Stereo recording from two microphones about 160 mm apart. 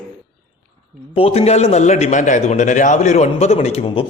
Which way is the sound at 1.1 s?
35° left (ahead or behind).